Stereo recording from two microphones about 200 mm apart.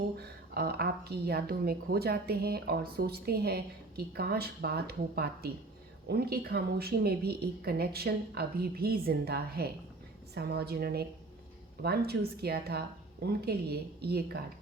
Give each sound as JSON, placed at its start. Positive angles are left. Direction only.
{"t": 0.5, "sound": "a woman's voice", "side_deg": -50}